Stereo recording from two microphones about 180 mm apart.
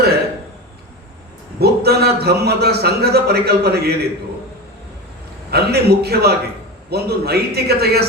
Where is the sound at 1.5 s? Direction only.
60° right (ahead or behind).